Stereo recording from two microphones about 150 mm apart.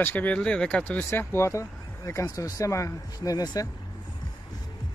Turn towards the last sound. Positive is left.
turn(degrees=25)  # may be behind; listen again after turning